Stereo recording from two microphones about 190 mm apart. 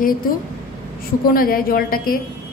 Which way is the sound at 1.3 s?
50° left (ahead or behind).